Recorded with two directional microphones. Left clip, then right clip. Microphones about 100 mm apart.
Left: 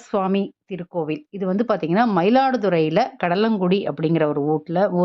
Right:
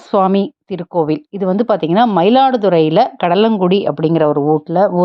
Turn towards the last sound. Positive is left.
turn(degrees=-20)  # may be behind; listen again after turning